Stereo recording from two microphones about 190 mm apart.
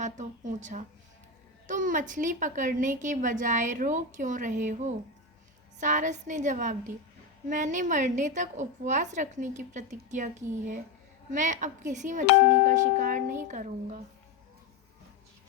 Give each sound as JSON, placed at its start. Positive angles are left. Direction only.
{"t": 0.0, "sound": "a woman's voice", "side_deg": -40}